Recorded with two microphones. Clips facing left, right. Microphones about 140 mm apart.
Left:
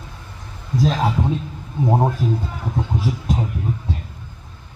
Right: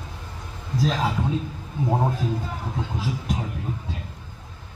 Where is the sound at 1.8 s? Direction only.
20° left (ahead or behind).